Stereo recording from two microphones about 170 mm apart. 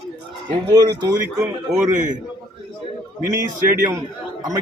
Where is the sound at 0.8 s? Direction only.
20° right (ahead or behind).